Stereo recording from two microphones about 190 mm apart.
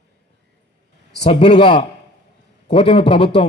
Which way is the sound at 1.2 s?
25° left (ahead or behind).